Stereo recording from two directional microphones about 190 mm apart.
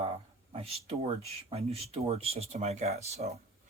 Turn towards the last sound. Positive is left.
turn(degrees=-35)  # may be behind; listen again after turning